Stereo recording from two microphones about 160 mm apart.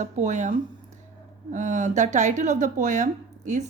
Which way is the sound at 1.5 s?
50° right (ahead or behind).